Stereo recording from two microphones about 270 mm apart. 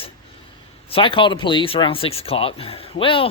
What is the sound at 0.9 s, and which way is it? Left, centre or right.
Speech, centre.